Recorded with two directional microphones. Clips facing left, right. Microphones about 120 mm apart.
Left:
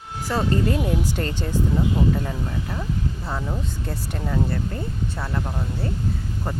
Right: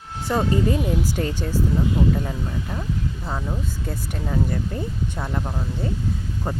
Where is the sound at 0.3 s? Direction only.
15° right (ahead or behind).